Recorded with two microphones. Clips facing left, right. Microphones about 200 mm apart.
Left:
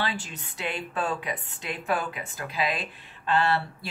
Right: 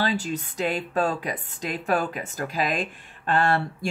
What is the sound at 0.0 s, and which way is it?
Speech, 40° right (ahead or behind).